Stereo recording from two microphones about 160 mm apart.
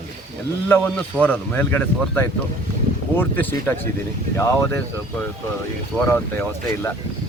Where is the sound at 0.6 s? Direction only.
15° left (ahead or behind).